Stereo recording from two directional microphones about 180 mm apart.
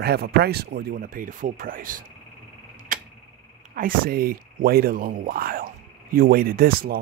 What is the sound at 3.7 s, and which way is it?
Speech, 55° right (ahead or behind).